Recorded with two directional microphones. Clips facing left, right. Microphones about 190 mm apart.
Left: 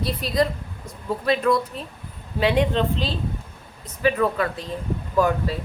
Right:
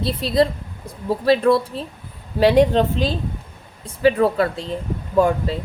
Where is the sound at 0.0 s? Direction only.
25° right (ahead or behind).